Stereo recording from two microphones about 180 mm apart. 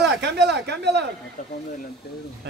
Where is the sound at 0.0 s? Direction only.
65° right (ahead or behind).